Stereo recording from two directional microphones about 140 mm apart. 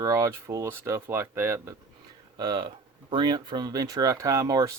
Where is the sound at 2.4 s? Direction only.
30° right (ahead or behind).